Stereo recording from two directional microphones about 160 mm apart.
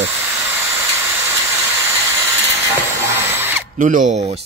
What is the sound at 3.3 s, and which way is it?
Drill, 15° right (ahead or behind).